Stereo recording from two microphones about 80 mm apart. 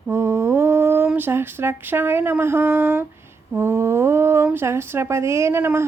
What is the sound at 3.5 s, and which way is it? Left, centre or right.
A woman's voice, right.